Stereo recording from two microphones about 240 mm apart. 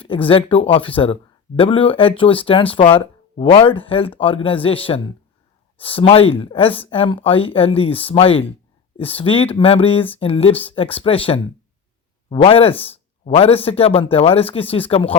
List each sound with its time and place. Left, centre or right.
0.0 s speech: left